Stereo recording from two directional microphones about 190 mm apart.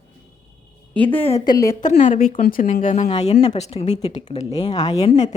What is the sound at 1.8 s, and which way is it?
Speech, 40° left (ahead or behind).